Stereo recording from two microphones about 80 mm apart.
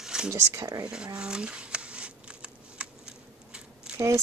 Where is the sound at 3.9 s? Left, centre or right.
Centre.